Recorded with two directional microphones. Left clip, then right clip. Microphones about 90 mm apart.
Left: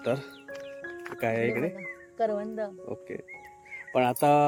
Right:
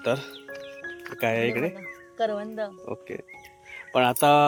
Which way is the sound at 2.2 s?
10° left (ahead or behind).